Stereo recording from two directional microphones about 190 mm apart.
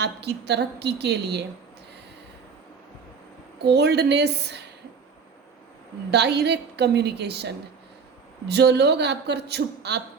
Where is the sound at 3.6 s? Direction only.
60° right (ahead or behind).